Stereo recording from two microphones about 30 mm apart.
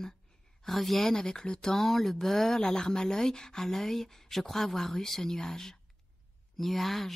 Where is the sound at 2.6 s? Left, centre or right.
Left.